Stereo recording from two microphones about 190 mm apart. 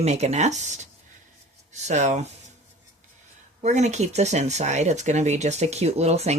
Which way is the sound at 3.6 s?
35° right (ahead or behind).